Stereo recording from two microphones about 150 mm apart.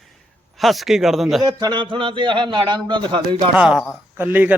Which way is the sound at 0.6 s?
Centre (ahead or behind).